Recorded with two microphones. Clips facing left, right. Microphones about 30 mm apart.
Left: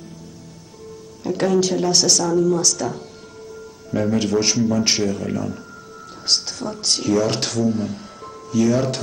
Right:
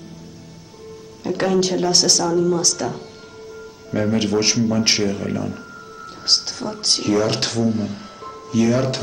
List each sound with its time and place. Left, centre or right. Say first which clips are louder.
1.2 s speech: even; centre